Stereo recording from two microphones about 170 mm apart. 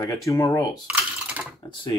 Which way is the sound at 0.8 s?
10° right (ahead or behind).